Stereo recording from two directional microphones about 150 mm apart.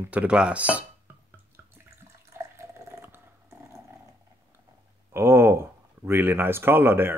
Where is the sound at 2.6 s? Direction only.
15° right (ahead or behind).